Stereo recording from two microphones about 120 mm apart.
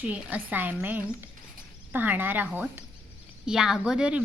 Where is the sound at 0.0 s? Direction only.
15° right (ahead or behind).